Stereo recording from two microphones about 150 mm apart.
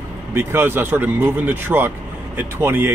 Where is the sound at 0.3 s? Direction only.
15° right (ahead or behind).